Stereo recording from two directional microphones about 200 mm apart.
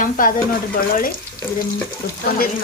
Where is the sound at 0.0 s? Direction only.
45° left (ahead or behind).